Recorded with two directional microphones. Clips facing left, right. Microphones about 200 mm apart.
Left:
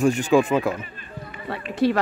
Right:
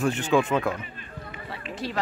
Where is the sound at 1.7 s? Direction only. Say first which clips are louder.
Left 13 dB; 60° left (ahead or behind).